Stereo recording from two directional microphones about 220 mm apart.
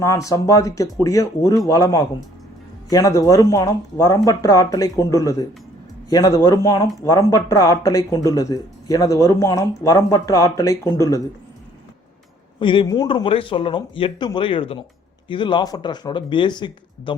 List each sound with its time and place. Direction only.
0.0 s speech: 15° left (ahead or behind)
12.5 s speech: 20° left (ahead or behind)